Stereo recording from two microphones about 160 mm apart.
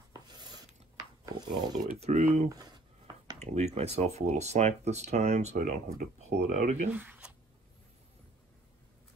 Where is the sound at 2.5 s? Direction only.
25° right (ahead or behind).